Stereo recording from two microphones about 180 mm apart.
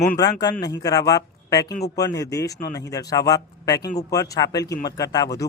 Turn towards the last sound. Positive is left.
turn(degrees=20)  # may be behind; listen again after turning